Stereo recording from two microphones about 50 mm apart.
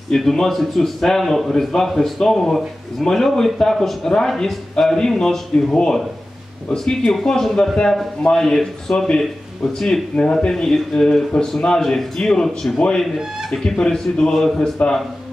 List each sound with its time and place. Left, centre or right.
0.1 s a man's voice: centre
6.7 s speech: centre
12.7 s speech: centre